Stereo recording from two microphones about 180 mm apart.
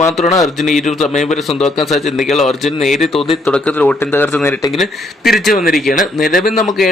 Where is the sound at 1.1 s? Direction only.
40° left (ahead or behind).